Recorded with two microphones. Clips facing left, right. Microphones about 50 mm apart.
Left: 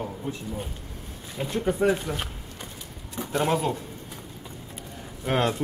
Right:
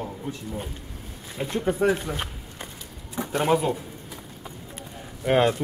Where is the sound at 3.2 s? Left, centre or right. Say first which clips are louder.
Right 2 dB; centre.